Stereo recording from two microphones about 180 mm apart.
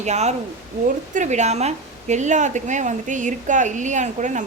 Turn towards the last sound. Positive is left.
turn(degrees=-40)  # may be behind; listen again after turning